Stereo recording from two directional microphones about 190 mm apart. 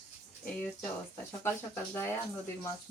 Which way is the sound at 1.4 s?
10° left (ahead or behind).